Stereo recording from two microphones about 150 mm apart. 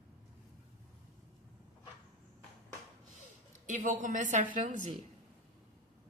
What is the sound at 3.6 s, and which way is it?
A woman's voice, 55° right (ahead or behind).